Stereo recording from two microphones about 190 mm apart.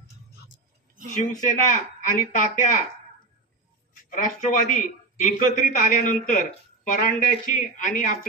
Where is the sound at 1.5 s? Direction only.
45° left (ahead or behind).